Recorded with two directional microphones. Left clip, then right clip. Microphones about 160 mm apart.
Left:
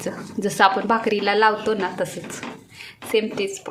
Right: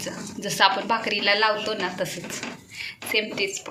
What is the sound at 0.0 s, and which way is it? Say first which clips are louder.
A woman's voice: left 5 dB; 65° left (ahead or behind).